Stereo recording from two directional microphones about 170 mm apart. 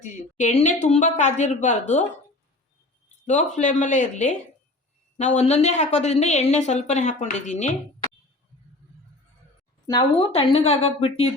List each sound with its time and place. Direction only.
0.0 s a woman's voice: 45° left (ahead or behind)
3.2 s a woman's voice: 45° left (ahead or behind)
9.8 s speech: 30° left (ahead or behind)